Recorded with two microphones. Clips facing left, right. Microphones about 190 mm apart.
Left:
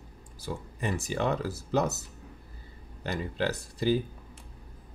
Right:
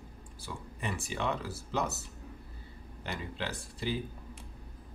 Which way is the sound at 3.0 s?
40° left (ahead or behind).